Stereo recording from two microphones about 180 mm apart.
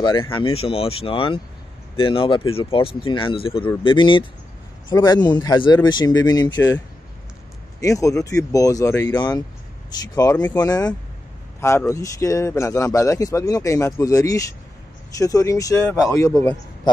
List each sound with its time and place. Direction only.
0.0 s speech: 25° left (ahead or behind)
7.8 s speech: 20° left (ahead or behind)